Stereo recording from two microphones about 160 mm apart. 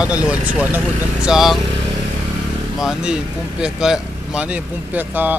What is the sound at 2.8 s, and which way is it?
Speech, 5° right (ahead or behind).